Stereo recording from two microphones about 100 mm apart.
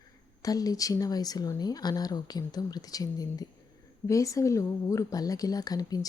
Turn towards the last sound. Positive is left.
turn(degrees=40)  # may be behind; listen again after turning